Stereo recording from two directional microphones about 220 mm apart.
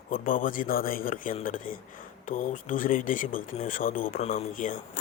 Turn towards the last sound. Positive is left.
turn(degrees=35)  # may be behind; listen again after turning